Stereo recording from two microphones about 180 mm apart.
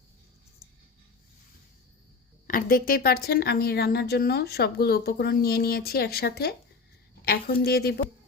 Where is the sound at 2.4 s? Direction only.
50° left (ahead or behind).